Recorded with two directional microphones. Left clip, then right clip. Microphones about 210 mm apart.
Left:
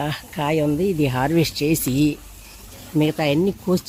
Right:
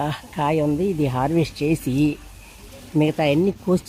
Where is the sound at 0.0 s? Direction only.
Centre (ahead or behind).